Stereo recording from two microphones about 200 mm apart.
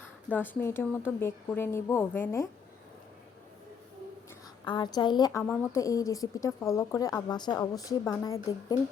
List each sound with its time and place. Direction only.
0.3 s a woman's voice: 10° left (ahead or behind)
4.6 s a woman's voice: 20° left (ahead or behind)